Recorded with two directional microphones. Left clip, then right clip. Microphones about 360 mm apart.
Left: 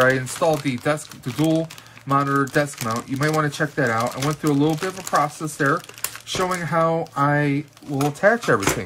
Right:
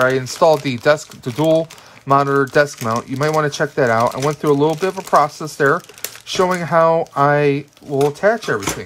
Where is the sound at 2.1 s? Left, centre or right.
Centre.